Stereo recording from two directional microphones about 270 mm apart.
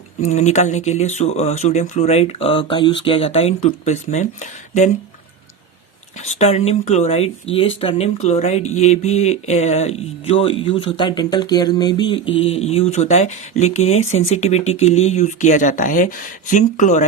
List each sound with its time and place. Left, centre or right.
0.2 s speech: left
6.2 s speech: left